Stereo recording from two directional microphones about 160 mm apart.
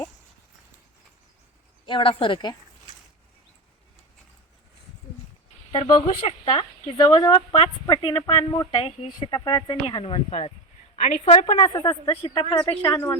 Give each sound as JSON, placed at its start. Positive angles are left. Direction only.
{"t": 1.9, "sound": "a woman's voice", "side_deg": 35}
{"t": 5.7, "sound": "a woman's voice", "side_deg": 40}